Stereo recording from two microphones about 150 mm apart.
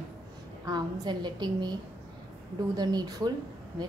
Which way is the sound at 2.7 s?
25° right (ahead or behind).